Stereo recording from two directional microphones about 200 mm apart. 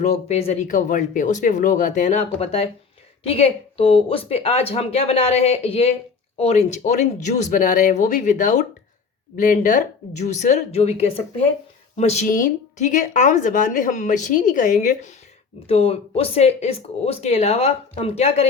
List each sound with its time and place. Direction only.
0.0 s a woman's voice: 35° left (ahead or behind)
15.6 s a woman's voice: 30° left (ahead or behind)